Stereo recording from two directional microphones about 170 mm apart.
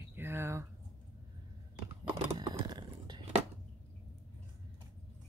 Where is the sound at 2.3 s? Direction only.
25° right (ahead or behind).